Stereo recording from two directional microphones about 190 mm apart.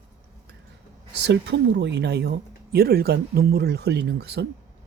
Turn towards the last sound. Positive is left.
turn(degrees=-60)  # may be behind; listen again after turning